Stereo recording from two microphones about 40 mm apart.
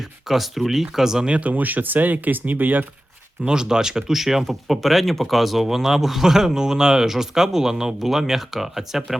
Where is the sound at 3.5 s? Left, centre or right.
Centre.